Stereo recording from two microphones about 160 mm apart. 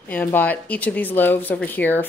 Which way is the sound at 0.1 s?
10° left (ahead or behind).